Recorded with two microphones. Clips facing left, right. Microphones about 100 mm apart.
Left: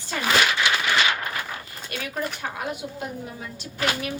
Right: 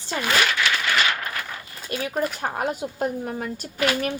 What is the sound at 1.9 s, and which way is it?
Speech, 30° right (ahead or behind).